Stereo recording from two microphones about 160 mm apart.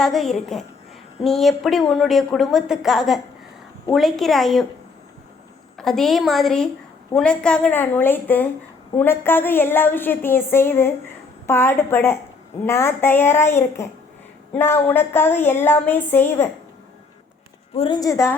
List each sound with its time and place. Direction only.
0.0 s a woman's voice: centre (ahead or behind)
5.7 s a woman's voice: 5° left (ahead or behind)
17.7 s a woman's voice: 30° left (ahead or behind)